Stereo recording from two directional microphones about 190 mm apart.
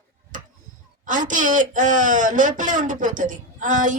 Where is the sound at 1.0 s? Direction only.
40° right (ahead or behind).